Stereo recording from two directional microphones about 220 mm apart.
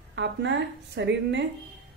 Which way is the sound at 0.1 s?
55° right (ahead or behind).